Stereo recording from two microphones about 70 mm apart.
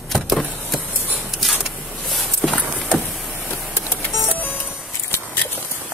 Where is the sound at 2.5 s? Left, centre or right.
Centre.